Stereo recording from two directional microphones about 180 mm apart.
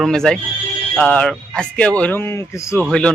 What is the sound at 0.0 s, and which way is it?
Speech, 5° left (ahead or behind).